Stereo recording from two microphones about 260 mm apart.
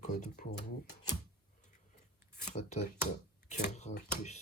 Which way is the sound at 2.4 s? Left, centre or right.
Left.